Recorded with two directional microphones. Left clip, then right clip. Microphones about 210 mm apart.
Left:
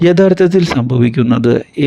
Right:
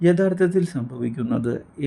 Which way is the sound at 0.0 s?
40° left (ahead or behind).